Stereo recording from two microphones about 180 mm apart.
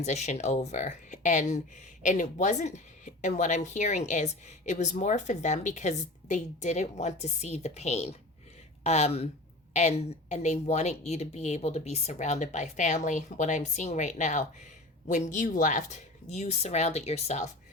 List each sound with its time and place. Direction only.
0.0 s speech: 40° left (ahead or behind)